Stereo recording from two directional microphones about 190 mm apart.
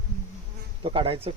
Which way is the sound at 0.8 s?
25° right (ahead or behind).